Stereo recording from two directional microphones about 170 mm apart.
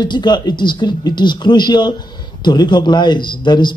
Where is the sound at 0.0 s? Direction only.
25° left (ahead or behind).